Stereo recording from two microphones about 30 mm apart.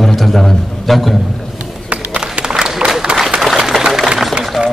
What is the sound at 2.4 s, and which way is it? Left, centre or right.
Applause, right.